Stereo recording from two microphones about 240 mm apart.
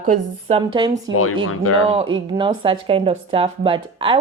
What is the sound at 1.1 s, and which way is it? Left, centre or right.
Speech, left.